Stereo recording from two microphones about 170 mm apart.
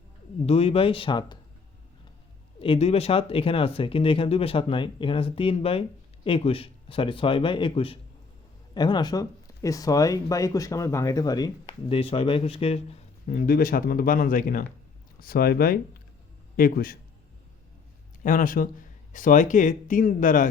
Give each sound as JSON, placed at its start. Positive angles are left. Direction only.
{"t": 0.4, "sound": "speech", "side_deg": 35}
{"t": 2.6, "sound": "speech", "side_deg": 35}
{"t": 13.2, "sound": "speech", "side_deg": 55}
{"t": 18.2, "sound": "speech", "side_deg": 55}